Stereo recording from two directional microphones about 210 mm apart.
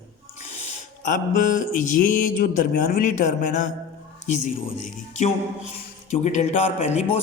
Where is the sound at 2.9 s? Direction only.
40° left (ahead or behind).